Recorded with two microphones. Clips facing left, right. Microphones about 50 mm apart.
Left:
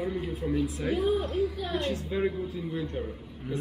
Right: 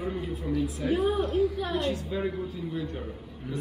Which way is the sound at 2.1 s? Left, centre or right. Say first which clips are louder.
Left 5 dB; centre.